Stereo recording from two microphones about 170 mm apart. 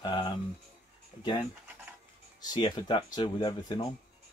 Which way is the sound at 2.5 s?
25° left (ahead or behind).